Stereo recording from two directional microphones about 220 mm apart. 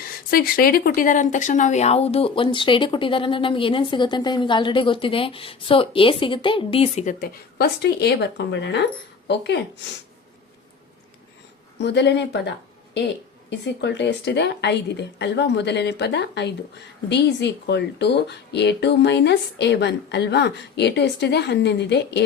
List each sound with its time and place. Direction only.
0.3 s a woman's voice: 45° left (ahead or behind)
11.8 s a woman's voice: 50° left (ahead or behind)